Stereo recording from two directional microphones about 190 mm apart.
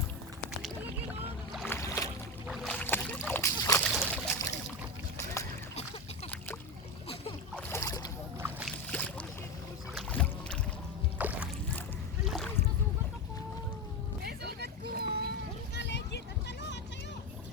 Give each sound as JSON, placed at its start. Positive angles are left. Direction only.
{"t": 1.7, "sound": "boat", "side_deg": 15}
{"t": 7.5, "sound": "boat", "side_deg": 15}
{"t": 8.4, "sound": "a sound", "side_deg": -10}
{"t": 8.9, "sound": "boat", "side_deg": 5}
{"t": 11.2, "sound": "music", "side_deg": -10}
{"t": 12.2, "sound": "rowboat", "side_deg": 0}
{"t": 14.3, "sound": "boat", "side_deg": -55}
{"t": 15.7, "sound": "vehicle", "side_deg": 65}